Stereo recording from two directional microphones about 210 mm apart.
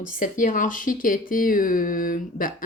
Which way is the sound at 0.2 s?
40° left (ahead or behind).